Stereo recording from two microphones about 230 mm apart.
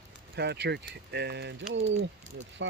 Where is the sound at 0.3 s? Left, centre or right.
Right.